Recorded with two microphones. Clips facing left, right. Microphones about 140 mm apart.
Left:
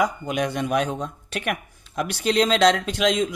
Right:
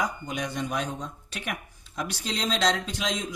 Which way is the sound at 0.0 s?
65° left (ahead or behind).